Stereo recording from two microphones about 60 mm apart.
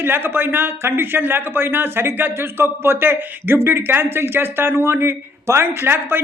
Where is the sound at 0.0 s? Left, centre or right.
Right.